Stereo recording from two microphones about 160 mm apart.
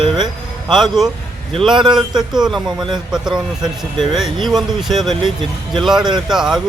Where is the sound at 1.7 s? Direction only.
30° right (ahead or behind).